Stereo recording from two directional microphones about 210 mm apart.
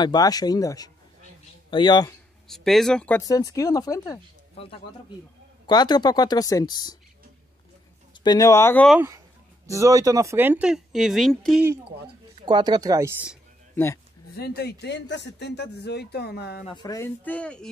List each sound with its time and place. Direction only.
0.0 s speech: 20° left (ahead or behind)
2.4 s speech: centre (ahead or behind); by 7.0 s 20° left (ahead or behind)
8.1 s speech: 20° left (ahead or behind)
9.7 s speech: 15° right (ahead or behind); by 11.6 s centre (ahead or behind)
12.4 s speech: 20° right (ahead or behind)
14.3 s speech: 50° left (ahead or behind)
16.6 s speech: 20° left (ahead or behind)